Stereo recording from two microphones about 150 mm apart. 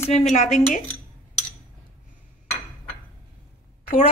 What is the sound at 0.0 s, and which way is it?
Speech, 50° left (ahead or behind).